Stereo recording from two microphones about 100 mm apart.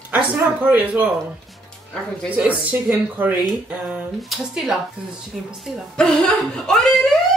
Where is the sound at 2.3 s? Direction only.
15° right (ahead or behind).